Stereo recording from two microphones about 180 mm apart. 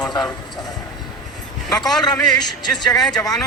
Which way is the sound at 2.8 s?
20° left (ahead or behind).